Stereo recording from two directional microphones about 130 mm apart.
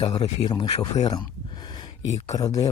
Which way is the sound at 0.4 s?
40° left (ahead or behind).